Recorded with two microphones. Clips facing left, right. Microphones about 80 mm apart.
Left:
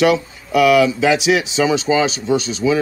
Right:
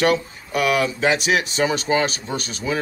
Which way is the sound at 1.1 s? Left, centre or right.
Right.